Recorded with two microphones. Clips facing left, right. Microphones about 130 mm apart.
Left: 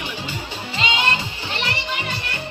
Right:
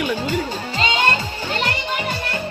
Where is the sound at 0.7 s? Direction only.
40° right (ahead or behind).